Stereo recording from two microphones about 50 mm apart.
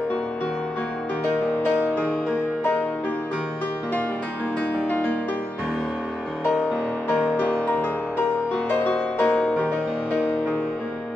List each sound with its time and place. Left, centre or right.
1.3 s music: left
4.8 s music: left
7.3 s music: left